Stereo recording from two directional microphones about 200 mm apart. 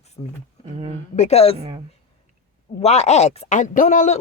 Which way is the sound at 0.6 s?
25° right (ahead or behind).